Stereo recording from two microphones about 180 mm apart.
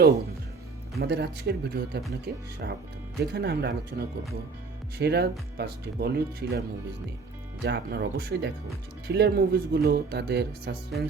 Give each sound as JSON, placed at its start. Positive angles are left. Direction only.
{"t": 0.9, "sound": "speech", "side_deg": -65}
{"t": 7.6, "sound": "speech", "side_deg": -65}